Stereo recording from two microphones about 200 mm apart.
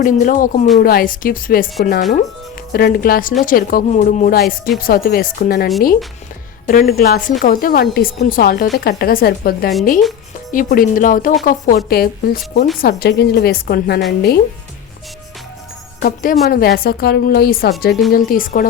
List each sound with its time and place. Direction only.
0.0 s a woman's voice: 45° left (ahead or behind)
6.7 s a woman's voice: 45° left (ahead or behind)
16.0 s a woman's voice: 45° left (ahead or behind)